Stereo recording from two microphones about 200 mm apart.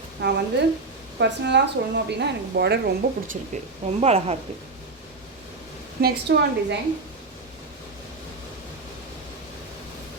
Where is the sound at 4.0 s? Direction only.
30° right (ahead or behind).